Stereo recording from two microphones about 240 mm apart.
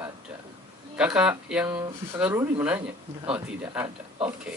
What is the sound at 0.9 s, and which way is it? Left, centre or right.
Speech, centre.